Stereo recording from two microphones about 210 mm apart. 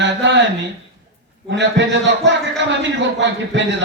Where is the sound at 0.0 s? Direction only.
55° right (ahead or behind).